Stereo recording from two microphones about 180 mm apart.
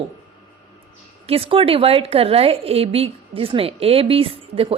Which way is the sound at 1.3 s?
30° right (ahead or behind).